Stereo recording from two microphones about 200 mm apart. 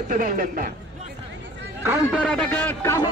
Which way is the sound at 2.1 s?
5° left (ahead or behind).